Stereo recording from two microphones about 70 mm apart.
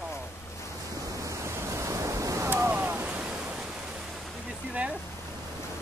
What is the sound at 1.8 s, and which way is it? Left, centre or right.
Waves, right.